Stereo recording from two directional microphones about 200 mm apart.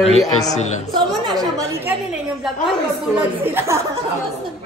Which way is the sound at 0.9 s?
20° right (ahead or behind).